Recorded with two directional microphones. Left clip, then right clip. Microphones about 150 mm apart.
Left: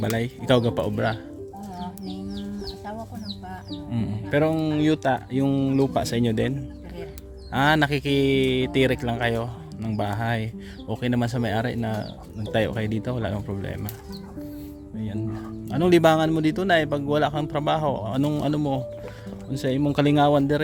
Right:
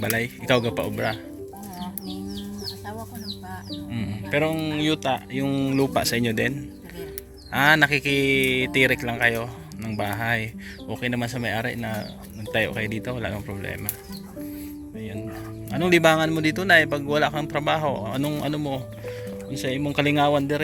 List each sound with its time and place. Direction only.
0.0 s speech: 25° left (ahead or behind)
3.9 s speech: 35° left (ahead or behind)
5.5 s speech: 15° left (ahead or behind)
7.5 s speech: 25° left (ahead or behind)
10.8 s speech: 35° left (ahead or behind)
15.7 s speech: 30° left (ahead or behind)